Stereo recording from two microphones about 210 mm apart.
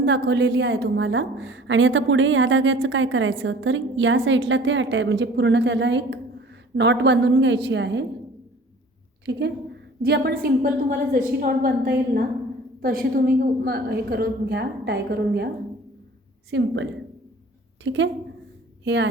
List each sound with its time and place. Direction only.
0.0 s a woman's voice: 55° right (ahead or behind)
10.0 s a woman's voice: 50° right (ahead or behind)
16.5 s a woman's voice: 60° right (ahead or behind)